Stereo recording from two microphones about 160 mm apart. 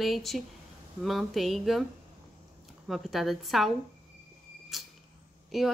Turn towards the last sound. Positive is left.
turn(degrees=0)  # may be behind; listen again after turning